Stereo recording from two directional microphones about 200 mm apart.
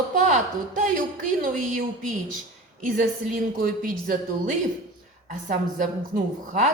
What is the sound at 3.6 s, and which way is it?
A woman's voice, 45° right (ahead or behind).